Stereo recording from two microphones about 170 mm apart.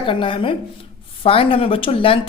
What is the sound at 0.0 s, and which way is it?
A woman's voice, 30° left (ahead or behind).